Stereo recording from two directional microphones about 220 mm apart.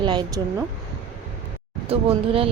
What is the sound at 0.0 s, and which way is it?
Speech, 20° right (ahead or behind).